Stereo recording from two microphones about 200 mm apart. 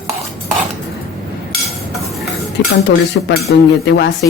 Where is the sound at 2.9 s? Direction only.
55° left (ahead or behind).